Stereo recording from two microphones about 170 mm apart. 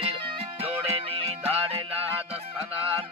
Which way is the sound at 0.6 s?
35° right (ahead or behind).